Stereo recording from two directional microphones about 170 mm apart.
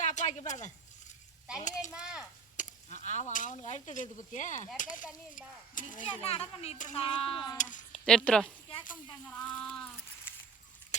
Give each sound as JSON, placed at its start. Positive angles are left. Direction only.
{"t": 0.0, "sound": "speech", "side_deg": 45}
{"t": 1.9, "sound": "a child's voice", "side_deg": -5}
{"t": 2.6, "sound": "speech", "side_deg": 45}
{"t": 6.1, "sound": "speech", "side_deg": 35}
{"t": 7.0, "sound": "speech", "side_deg": 30}
{"t": 7.6, "sound": "speech", "side_deg": 50}
{"t": 7.9, "sound": "speech", "side_deg": 5}
{"t": 9.2, "sound": "a sound", "side_deg": 10}